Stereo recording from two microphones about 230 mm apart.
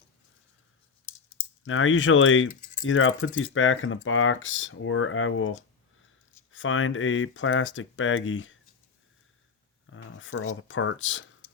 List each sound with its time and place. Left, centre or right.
1.6 s speech: left
9.9 s speech: left